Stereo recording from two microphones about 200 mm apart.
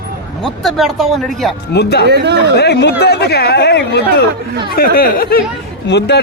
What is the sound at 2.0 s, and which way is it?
Speech, 55° right (ahead or behind).